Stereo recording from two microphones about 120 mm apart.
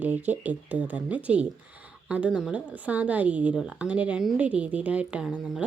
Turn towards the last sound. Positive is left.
turn(degrees=-5)  # may be behind; listen again after turning